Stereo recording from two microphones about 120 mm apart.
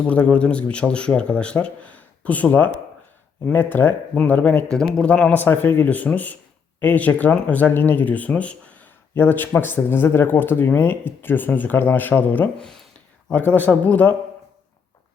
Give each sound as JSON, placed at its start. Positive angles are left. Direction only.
{"t": 0.0, "sound": "speech", "side_deg": 10}
{"t": 12.6, "sound": "a sound", "side_deg": 5}
{"t": 13.3, "sound": "speech", "side_deg": 15}